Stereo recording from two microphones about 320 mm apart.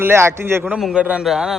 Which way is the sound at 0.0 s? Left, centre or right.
Centre.